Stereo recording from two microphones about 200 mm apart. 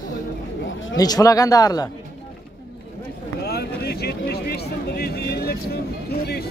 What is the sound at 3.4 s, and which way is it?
Speech, 55° left (ahead or behind).